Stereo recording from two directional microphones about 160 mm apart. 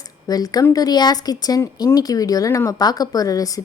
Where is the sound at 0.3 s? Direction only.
25° left (ahead or behind).